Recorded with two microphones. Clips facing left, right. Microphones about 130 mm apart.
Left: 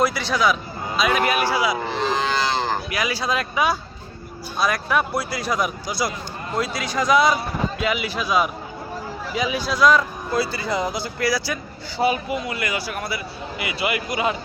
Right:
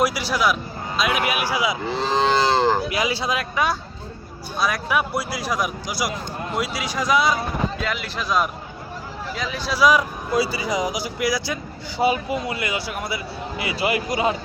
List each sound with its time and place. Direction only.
0.0 s a man's voice: 10° right (ahead or behind)
3.5 s a man's voice: 5° left (ahead or behind); by 14.3 s 30° right (ahead or behind)